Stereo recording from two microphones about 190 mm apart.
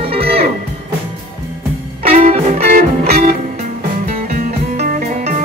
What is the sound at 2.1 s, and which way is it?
Music, 40° right (ahead or behind).